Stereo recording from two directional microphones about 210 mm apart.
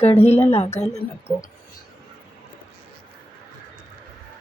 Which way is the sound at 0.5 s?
30° left (ahead or behind).